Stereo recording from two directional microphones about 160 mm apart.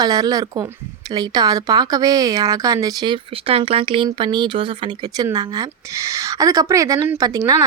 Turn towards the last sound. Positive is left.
turn(degrees=-25)  # may be behind; listen again after turning